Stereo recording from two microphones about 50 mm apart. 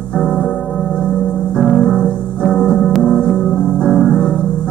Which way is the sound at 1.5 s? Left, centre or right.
Centre.